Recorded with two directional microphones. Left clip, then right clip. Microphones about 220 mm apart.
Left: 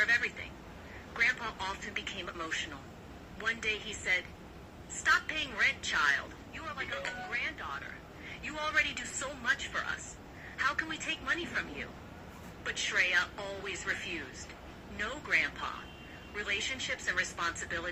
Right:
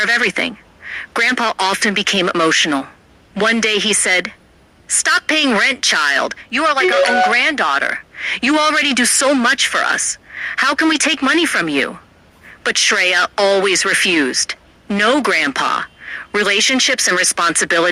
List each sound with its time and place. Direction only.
0.0 s a woman's voice: 50° right (ahead or behind)